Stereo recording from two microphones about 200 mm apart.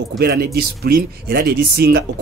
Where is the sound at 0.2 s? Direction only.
50° right (ahead or behind).